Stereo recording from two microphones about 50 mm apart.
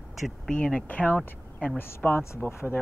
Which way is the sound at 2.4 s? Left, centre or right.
Left.